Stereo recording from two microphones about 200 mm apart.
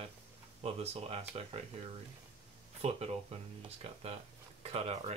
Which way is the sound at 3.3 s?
30° right (ahead or behind).